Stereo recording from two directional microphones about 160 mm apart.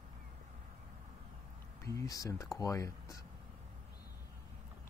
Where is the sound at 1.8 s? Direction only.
20° left (ahead or behind).